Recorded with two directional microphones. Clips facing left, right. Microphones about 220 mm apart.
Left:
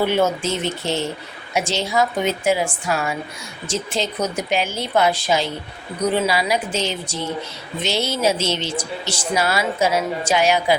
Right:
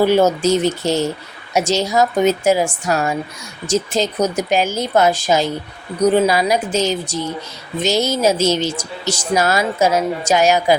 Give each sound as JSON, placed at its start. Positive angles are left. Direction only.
{"t": 0.0, "sound": "a woman's voice", "side_deg": -40}